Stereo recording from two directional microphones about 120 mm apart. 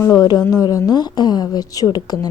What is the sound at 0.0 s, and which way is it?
A woman's voice, 30° left (ahead or behind).